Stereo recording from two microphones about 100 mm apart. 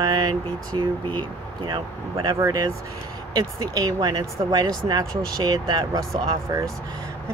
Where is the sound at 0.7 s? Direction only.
50° right (ahead or behind).